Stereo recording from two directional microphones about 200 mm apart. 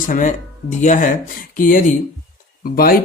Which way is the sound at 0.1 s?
40° left (ahead or behind).